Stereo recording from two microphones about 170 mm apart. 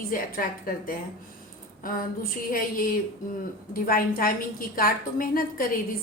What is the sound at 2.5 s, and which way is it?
Speech, 55° left (ahead or behind).